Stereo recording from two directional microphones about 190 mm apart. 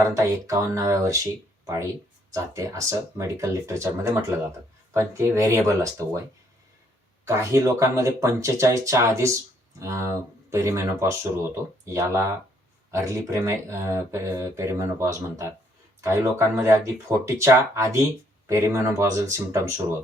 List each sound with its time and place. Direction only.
0.0 s speech: 15° right (ahead or behind)
7.3 s speech: 15° right (ahead or behind)